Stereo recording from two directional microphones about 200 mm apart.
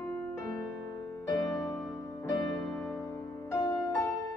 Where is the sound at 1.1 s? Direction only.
15° left (ahead or behind).